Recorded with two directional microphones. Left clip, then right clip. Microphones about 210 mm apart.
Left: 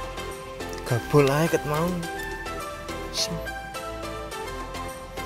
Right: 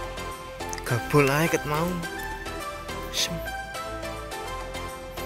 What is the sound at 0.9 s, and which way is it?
Speech, centre (ahead or behind).